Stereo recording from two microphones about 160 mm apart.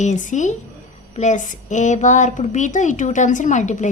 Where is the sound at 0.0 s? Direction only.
50° left (ahead or behind).